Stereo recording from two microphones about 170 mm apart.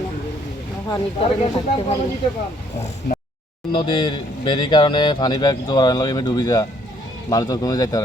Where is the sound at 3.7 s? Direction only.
30° left (ahead or behind).